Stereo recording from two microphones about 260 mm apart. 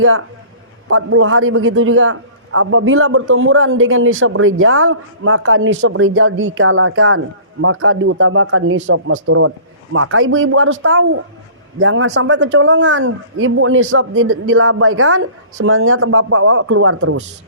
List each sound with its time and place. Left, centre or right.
0.0 s a man's voice: right